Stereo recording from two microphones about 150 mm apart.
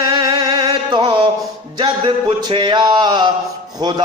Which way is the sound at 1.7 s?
35° right (ahead or behind).